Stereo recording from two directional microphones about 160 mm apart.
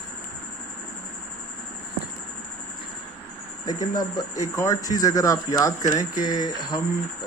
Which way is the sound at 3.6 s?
25° left (ahead or behind).